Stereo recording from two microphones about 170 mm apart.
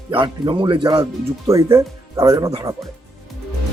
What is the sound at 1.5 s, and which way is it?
Speech, 15° right (ahead or behind).